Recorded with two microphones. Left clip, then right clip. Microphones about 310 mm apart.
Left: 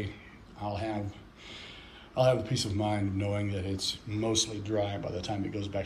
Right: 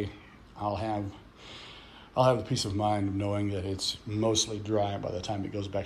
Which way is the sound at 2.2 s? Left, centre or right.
Centre.